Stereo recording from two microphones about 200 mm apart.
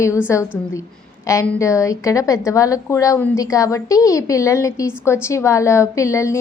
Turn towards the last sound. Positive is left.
turn(degrees=15)  # may be behind; listen again after turning